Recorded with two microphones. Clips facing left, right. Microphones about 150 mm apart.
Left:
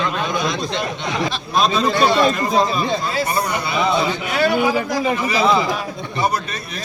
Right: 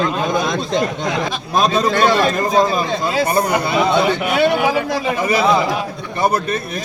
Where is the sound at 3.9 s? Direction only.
65° right (ahead or behind).